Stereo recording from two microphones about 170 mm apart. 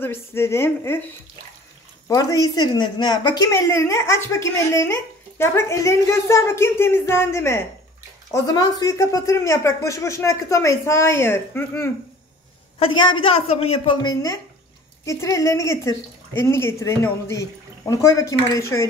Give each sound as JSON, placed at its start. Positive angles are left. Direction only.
{"t": 0.0, "sound": "speech", "side_deg": 15}
{"t": 2.0, "sound": "speech", "side_deg": 20}
{"t": 12.7, "sound": "a woman's voice", "side_deg": 30}
{"t": 15.0, "sound": "speech", "side_deg": 20}